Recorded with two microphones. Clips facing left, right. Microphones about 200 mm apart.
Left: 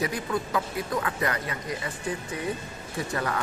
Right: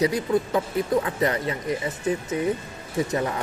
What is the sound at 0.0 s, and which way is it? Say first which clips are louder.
Speech: right 7 dB; 20° right (ahead or behind).